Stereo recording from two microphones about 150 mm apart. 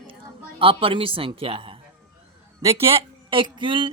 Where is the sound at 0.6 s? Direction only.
35° right (ahead or behind).